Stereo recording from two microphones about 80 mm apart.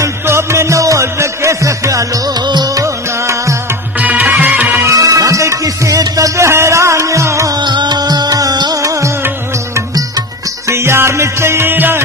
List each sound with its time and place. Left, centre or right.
0.0 s music: right
2.4 s music: right
2.7 s music: right
4.0 s music: right
4.8 s music: right
7.6 s music: right
8.8 s music: right
10.7 s music: right